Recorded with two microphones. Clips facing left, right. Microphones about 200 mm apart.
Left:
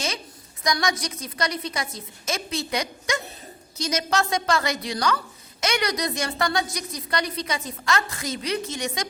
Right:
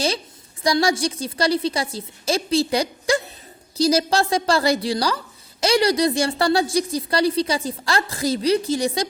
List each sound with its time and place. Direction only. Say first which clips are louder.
0.6 s a woman's voice: right 6 dB; 30° right (ahead or behind)